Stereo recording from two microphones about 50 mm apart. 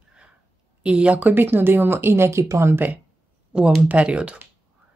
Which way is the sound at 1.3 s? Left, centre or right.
Right.